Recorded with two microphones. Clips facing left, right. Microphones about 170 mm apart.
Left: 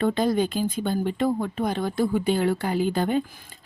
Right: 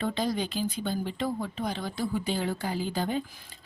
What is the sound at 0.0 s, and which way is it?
Speech, 55° left (ahead or behind).